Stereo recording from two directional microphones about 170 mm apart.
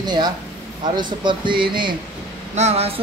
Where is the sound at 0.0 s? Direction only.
25° right (ahead or behind).